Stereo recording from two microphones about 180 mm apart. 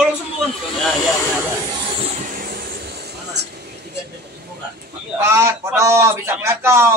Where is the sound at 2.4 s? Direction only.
60° right (ahead or behind).